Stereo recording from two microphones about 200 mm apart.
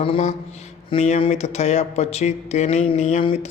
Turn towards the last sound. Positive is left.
turn(degrees=30)  # may be behind; listen again after turning